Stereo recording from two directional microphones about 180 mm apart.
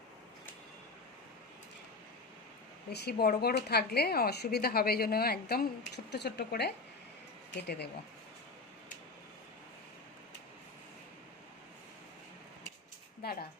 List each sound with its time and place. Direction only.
2.9 s speech: 65° left (ahead or behind)